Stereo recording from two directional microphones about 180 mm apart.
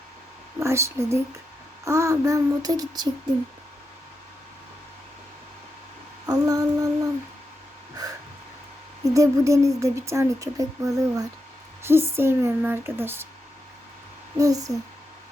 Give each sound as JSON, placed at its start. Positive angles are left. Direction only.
{"t": 0.6, "sound": "speech", "side_deg": -15}
{"t": 1.8, "sound": "child singing", "side_deg": -15}
{"t": 6.2, "sound": "female singing", "side_deg": -20}
{"t": 8.0, "sound": "a sound", "side_deg": -20}
{"t": 9.0, "sound": "speech", "side_deg": -20}
{"t": 14.3, "sound": "child singing", "side_deg": -20}